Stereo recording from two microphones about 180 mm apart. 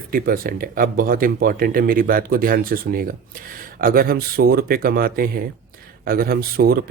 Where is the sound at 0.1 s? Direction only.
55° right (ahead or behind).